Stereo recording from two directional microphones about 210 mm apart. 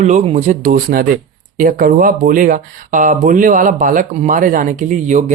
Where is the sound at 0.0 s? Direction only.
30° right (ahead or behind).